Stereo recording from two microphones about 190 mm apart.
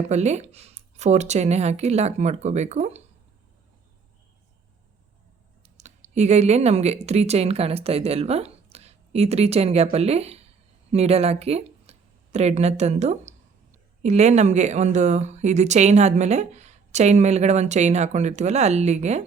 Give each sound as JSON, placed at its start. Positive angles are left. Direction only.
{"t": 0.1, "sound": "speech", "side_deg": -35}
{"t": 5.6, "sound": "speech", "side_deg": -40}